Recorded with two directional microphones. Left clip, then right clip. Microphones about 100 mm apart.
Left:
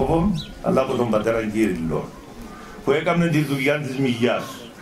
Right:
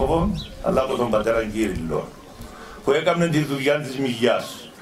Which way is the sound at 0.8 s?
20° right (ahead or behind).